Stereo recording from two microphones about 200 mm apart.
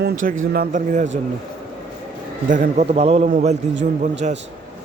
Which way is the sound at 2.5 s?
40° right (ahead or behind).